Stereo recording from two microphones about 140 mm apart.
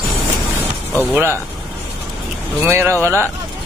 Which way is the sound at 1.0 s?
15° right (ahead or behind).